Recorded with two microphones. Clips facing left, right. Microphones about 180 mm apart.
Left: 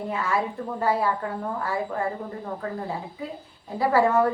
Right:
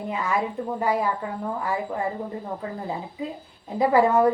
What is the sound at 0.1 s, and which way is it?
A woman's voice, 15° right (ahead or behind).